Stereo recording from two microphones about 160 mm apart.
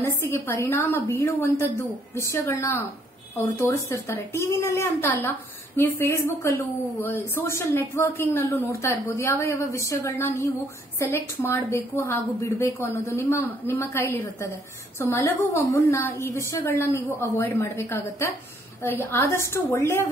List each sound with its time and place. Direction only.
0.0 s a woman's voice: 15° left (ahead or behind)